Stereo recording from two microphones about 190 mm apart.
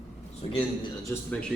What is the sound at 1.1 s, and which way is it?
Speech, 5° left (ahead or behind).